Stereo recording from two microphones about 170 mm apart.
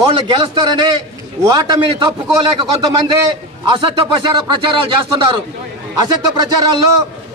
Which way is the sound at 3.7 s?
30° right (ahead or behind).